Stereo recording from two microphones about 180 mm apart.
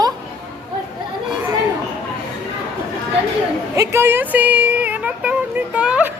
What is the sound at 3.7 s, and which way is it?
Speech, 15° right (ahead or behind).